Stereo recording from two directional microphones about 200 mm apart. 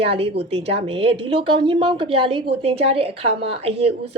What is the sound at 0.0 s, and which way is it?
A woman's voice, 30° right (ahead or behind).